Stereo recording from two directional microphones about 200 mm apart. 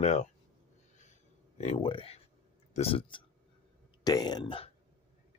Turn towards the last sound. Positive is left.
turn(degrees=25)  # may be behind; listen again after turning